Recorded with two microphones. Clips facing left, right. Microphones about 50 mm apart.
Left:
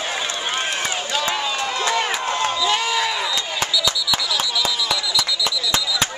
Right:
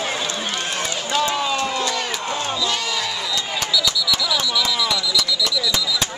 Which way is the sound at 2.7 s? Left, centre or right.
Left.